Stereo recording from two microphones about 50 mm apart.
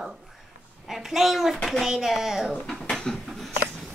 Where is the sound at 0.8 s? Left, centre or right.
Centre.